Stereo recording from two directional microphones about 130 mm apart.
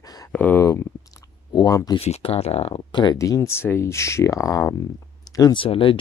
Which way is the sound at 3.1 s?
25° left (ahead or behind).